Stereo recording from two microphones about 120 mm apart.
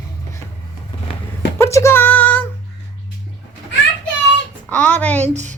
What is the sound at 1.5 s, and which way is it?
Music, 20° left (ahead or behind).